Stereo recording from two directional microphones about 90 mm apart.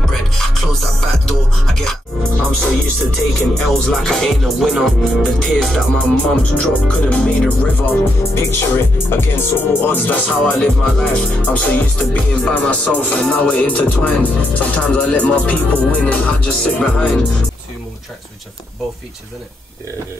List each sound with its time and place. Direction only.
0.0 s music: centre (ahead or behind)
3.5 s music: 5° left (ahead or behind)
6.5 s music: 15° left (ahead or behind)
8.5 s speech: 25° left (ahead or behind); by 11.2 s 10° left (ahead or behind)
11.4 s music: 15° left (ahead or behind)